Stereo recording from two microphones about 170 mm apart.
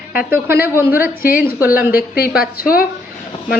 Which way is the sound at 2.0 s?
65° left (ahead or behind).